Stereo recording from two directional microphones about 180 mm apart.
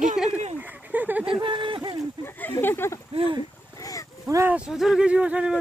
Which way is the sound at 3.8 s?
20° left (ahead or behind).